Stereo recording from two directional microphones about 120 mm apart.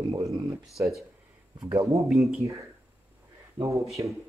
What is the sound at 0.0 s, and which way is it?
Speech, 25° right (ahead or behind).